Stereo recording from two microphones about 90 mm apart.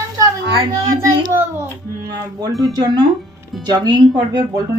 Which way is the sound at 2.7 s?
45° right (ahead or behind).